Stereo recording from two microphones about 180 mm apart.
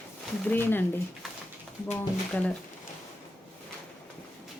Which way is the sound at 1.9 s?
10° left (ahead or behind).